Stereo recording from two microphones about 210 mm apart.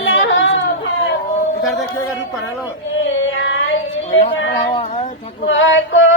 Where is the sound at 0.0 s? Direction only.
60° left (ahead or behind).